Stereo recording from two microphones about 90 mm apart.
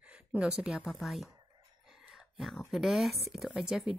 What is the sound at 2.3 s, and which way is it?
A woman's voice, centre (ahead or behind).